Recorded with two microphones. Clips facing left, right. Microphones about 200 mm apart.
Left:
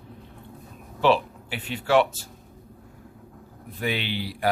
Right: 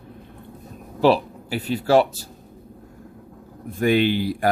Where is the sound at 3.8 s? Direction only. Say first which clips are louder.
Right 10 dB; 45° right (ahead or behind).